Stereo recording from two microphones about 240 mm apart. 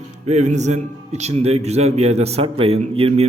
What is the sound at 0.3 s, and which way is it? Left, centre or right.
A man's voice, right.